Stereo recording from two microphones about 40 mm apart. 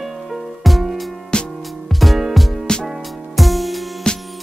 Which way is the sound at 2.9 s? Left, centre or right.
Centre.